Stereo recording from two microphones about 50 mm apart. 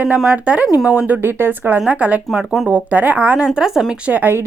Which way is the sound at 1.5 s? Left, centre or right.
Right.